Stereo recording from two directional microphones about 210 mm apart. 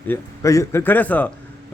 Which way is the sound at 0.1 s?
15° left (ahead or behind).